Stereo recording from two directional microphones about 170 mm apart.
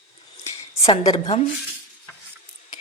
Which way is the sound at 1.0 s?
25° left (ahead or behind).